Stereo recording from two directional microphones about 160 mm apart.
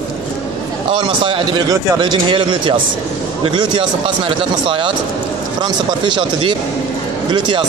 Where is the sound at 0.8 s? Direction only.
30° right (ahead or behind).